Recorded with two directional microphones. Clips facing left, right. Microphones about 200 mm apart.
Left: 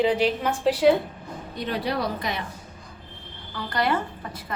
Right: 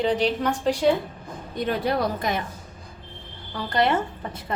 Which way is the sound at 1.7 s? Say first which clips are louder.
Right 2 dB; 50° right (ahead or behind).